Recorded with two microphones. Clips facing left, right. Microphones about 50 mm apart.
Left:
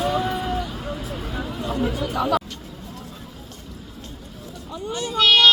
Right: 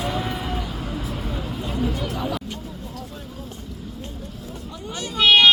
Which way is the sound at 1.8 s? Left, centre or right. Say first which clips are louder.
Left 2 dB; left.